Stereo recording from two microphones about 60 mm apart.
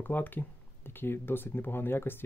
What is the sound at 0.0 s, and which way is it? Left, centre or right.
Speech, left.